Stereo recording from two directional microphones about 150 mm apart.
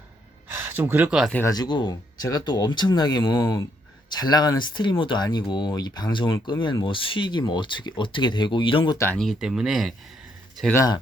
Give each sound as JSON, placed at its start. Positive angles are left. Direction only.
{"t": 0.4, "sound": "speech", "side_deg": -15}
{"t": 1.5, "sound": "speech", "side_deg": 25}
{"t": 9.1, "sound": "speech", "side_deg": 0}